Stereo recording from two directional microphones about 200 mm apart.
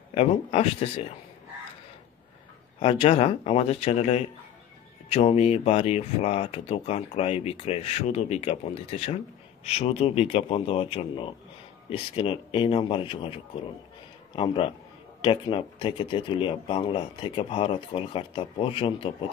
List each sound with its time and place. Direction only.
0.1 s speech: 30° left (ahead or behind)
2.8 s speech: 30° left (ahead or behind)